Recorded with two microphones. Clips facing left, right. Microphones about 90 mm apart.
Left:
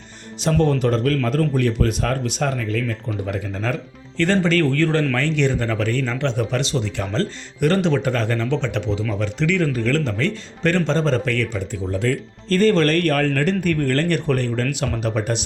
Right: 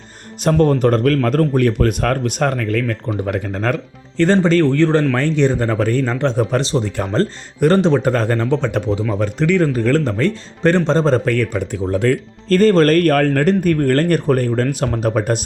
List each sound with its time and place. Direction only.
0.6 s speech: 50° right (ahead or behind)
4.2 s a man's voice: 35° right (ahead or behind)
11.5 s speech: 60° right (ahead or behind); by 15.4 s 45° right (ahead or behind)